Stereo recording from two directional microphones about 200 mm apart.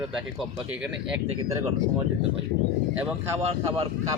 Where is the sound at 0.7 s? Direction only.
5° right (ahead or behind).